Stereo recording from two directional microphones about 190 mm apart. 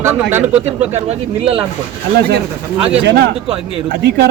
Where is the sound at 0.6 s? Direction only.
35° right (ahead or behind).